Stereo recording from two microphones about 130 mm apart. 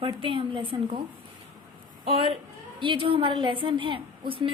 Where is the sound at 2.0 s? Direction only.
45° right (ahead or behind).